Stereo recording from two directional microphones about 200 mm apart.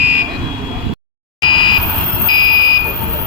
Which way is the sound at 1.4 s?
25° left (ahead or behind).